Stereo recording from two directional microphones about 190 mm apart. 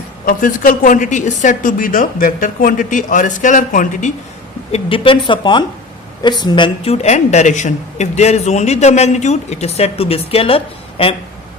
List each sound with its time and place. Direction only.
0.3 s a woman's voice: 45° left (ahead or behind)
4.7 s a woman's voice: 30° left (ahead or behind)